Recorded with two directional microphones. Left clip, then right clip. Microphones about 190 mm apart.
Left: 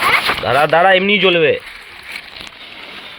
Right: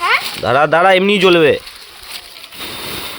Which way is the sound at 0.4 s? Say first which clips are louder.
Right 2 dB; 25° right (ahead or behind).